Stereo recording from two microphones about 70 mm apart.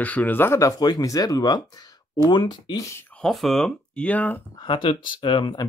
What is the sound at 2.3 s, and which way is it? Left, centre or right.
Speech, left.